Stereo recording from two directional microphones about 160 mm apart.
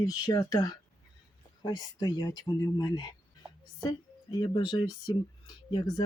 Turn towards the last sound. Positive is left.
turn(degrees=25)  # may be behind; listen again after turning